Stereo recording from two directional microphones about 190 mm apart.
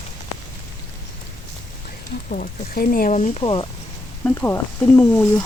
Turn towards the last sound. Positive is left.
turn(degrees=10)  # may be behind; listen again after turning